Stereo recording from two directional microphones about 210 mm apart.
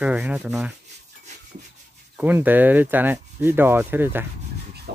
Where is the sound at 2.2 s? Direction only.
10° right (ahead or behind).